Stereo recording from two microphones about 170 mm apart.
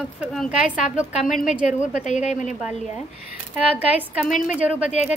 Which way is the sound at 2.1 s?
45° left (ahead or behind).